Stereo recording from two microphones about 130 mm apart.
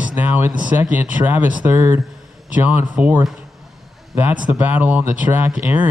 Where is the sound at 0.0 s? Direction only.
15° right (ahead or behind).